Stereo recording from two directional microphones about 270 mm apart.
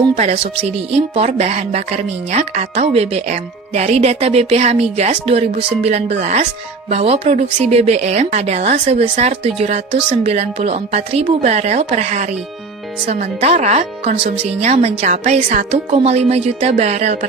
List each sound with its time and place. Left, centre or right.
0.2 s speech: right